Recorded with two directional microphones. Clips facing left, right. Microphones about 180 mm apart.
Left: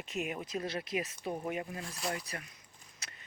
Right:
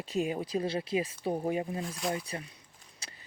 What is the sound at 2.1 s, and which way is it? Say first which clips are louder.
Speech: right 5 dB; 30° right (ahead or behind).